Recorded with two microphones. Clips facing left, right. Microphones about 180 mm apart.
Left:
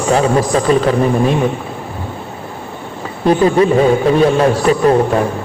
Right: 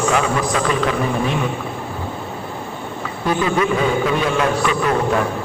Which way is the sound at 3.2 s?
35° left (ahead or behind).